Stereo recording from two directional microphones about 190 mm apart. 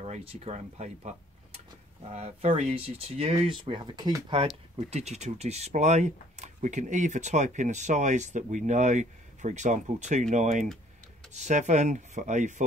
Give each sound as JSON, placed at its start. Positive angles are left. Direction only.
{"t": 0.0, "sound": "speech", "side_deg": -30}
{"t": 4.7, "sound": "speech", "side_deg": -35}